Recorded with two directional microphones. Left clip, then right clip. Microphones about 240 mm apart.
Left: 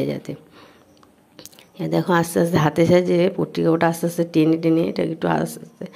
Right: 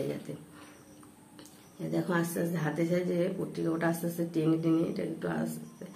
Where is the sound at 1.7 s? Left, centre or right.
Left.